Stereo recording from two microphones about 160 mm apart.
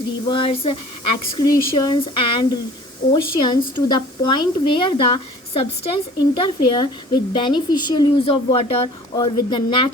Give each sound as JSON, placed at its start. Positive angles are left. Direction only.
{"t": 0.3, "sound": "a woman's voice", "side_deg": 30}